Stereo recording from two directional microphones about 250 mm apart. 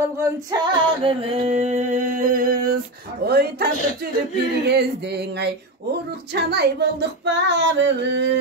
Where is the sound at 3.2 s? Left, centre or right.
Right.